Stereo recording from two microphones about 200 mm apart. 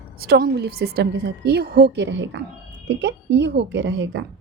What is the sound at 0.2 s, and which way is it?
A woman's voice, 50° right (ahead or behind).